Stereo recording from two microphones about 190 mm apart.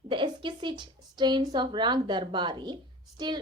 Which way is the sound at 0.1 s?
25° right (ahead or behind).